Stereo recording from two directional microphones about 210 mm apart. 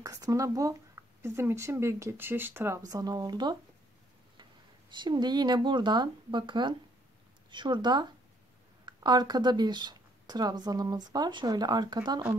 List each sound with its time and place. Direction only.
0.0 s speech: 15° right (ahead or behind)